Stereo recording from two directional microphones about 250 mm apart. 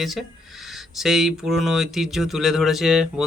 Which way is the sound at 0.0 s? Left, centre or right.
Centre.